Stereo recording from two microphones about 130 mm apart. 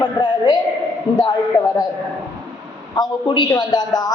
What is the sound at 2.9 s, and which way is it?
A man's voice, 35° left (ahead or behind).